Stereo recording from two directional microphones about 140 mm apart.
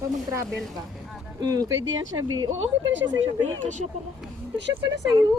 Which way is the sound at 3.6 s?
60° right (ahead or behind).